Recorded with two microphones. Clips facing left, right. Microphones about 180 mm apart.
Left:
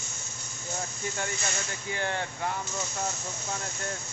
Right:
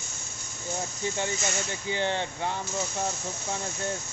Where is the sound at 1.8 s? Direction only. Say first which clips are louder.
Right 3 dB; 25° right (ahead or behind).